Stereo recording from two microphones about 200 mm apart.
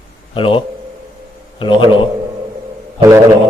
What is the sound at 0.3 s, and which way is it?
A man's voice, 25° left (ahead or behind).